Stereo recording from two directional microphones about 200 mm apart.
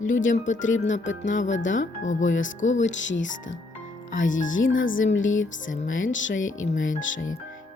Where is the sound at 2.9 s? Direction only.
65° left (ahead or behind).